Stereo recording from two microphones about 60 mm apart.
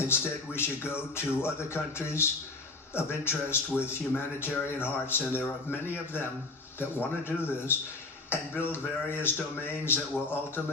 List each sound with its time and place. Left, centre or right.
0.0 s a man's voice: left
7.3 s speech: left